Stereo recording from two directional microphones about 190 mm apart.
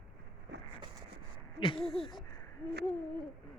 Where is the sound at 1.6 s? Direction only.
25° left (ahead or behind).